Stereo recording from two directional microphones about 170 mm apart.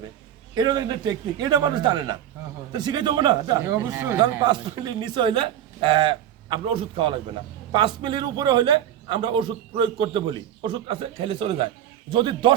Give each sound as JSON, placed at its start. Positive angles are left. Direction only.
{"t": 0.5, "sound": "a man's voice", "side_deg": -25}
{"t": 4.4, "sound": "a man's voice", "side_deg": -30}